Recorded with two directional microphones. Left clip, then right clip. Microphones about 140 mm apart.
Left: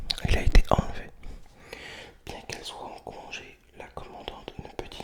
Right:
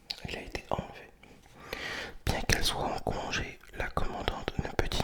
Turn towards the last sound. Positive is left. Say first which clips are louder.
# right 6 dB
turn(degrees=-25)  # may be behind; listen again after turning